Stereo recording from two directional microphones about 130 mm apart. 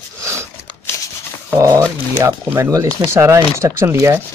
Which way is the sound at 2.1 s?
20° right (ahead or behind).